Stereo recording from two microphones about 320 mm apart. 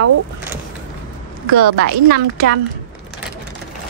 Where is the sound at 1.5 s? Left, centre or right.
Right.